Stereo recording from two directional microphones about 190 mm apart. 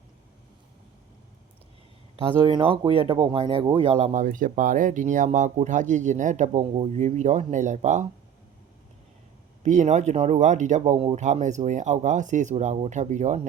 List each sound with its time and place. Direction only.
2.1 s speech: 30° right (ahead or behind)
9.6 s speech: 40° right (ahead or behind)